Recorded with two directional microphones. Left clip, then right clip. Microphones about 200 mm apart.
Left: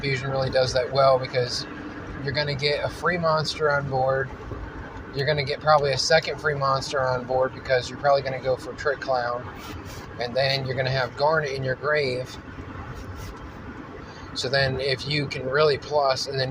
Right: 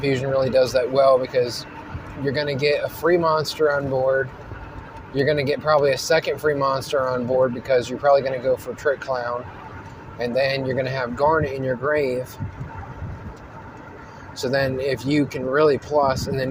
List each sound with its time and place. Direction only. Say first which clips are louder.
0.0 s speech: right 5 dB; 50° right (ahead or behind)
14.3 s speech: right 2 dB; 50° right (ahead or behind)